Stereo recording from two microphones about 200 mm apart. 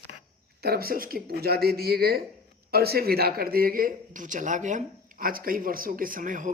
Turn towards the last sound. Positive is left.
turn(degrees=-40)  # may be behind; listen again after turning